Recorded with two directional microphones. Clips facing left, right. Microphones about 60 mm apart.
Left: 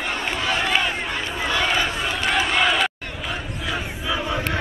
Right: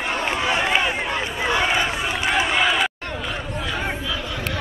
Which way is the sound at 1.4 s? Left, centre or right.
Centre.